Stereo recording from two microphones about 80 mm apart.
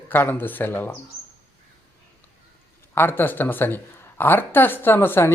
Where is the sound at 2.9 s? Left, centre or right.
Left.